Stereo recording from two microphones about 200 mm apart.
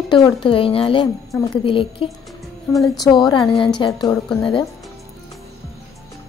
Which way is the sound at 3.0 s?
20° left (ahead or behind).